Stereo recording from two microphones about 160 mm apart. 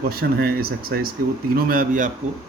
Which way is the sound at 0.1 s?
70° right (ahead or behind).